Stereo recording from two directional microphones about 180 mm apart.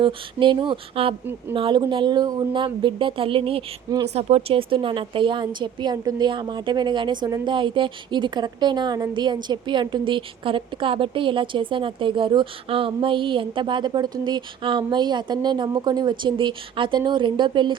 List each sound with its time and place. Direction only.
0.0 s a woman's voice: 25° right (ahead or behind)